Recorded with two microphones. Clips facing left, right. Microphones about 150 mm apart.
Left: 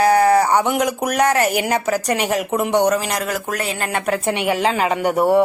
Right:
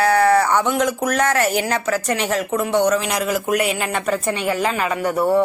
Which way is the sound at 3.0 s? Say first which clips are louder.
Right 2 dB; centre (ahead or behind).